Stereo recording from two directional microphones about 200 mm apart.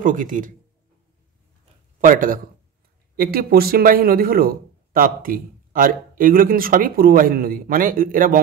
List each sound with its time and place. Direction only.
0.0 s a man's voice: 40° right (ahead or behind)
2.0 s speech: 45° right (ahead or behind)